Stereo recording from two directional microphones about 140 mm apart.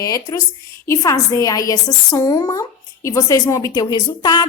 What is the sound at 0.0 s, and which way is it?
A woman's voice, 25° left (ahead or behind).